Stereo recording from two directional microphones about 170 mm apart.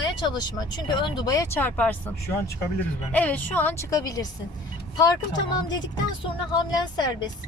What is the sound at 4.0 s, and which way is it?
Speech, 20° left (ahead or behind).